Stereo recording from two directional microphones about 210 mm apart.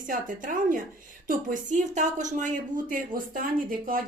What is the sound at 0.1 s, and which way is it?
Speech, 40° right (ahead or behind).